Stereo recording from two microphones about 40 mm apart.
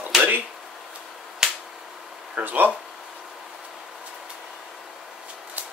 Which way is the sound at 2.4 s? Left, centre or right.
Right.